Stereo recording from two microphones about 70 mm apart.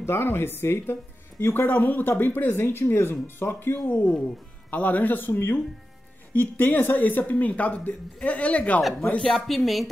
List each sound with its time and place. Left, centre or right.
0.0 s speech: left; by 8.8 s centre
9.3 s speech: centre